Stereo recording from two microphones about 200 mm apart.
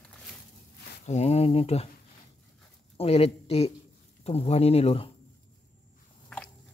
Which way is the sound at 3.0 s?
30° left (ahead or behind).